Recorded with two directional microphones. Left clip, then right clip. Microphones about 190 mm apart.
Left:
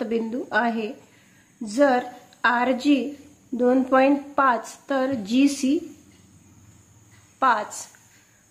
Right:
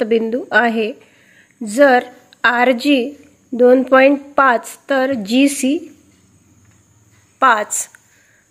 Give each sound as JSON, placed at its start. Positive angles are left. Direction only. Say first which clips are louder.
{"t": 0.0, "sound": "a woman's voice", "louder": "right 10 dB", "side_deg": -35}
{"t": 7.3, "sound": "a woman's voice", "louder": "right 8 dB", "side_deg": -35}